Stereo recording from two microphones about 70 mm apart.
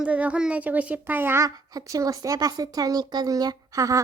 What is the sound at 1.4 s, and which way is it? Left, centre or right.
A woman's voice, right.